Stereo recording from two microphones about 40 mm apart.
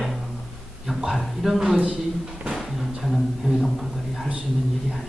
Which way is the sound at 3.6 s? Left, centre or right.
Centre.